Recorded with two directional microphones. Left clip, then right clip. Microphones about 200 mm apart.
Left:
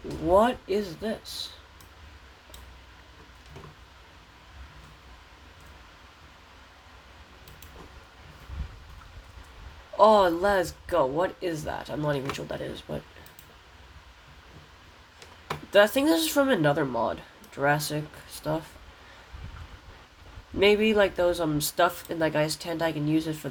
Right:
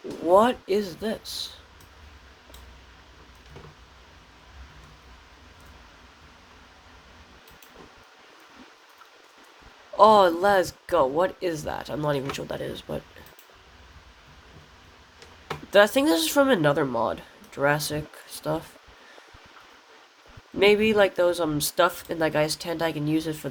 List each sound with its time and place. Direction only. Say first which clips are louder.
0.3 s speech: right 3 dB; 25° right (ahead or behind)
9.9 s speech: right 3 dB; 25° right (ahead or behind)
15.7 s speech: right 2 dB; 20° right (ahead or behind)
20.6 s speech: right 2 dB; 15° right (ahead or behind)